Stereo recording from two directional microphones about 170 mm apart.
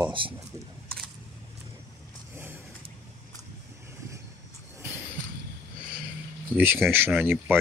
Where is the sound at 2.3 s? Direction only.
10° right (ahead or behind).